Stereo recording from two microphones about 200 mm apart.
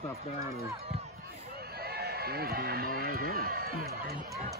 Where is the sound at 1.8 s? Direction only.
50° right (ahead or behind).